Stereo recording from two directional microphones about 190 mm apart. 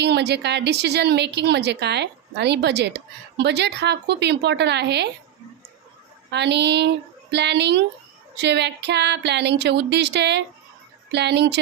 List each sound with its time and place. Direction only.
0.0 s a woman's voice: 60° right (ahead or behind)
6.3 s a woman's voice: 65° right (ahead or behind)